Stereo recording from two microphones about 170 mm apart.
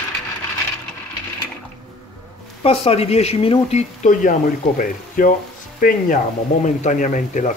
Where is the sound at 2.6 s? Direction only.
35° left (ahead or behind).